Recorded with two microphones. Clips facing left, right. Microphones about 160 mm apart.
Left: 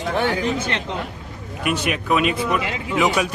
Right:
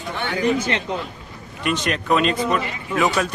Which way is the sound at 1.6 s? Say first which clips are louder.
Even; 10° left (ahead or behind).